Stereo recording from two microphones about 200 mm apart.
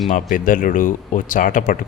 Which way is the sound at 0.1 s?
40° left (ahead or behind).